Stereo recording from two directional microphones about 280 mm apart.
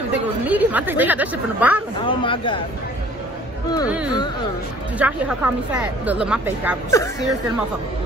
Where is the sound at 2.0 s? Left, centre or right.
Centre.